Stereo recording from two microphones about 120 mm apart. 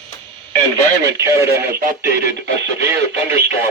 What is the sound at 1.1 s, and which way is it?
Speech, 25° right (ahead or behind).